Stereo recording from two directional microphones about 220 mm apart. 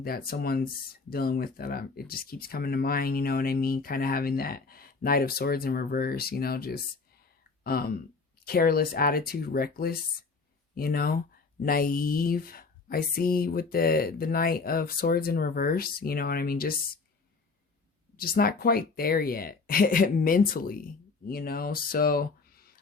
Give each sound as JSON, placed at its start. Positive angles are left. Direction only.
{"t": 0.0, "sound": "speech", "side_deg": 45}
{"t": 18.2, "sound": "speech", "side_deg": 40}